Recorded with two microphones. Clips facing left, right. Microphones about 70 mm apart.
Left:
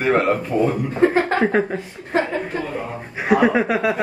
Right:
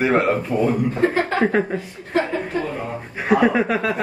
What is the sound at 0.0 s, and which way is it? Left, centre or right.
Speech, centre.